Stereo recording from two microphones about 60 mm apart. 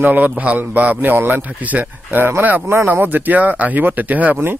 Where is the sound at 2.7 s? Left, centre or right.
Right.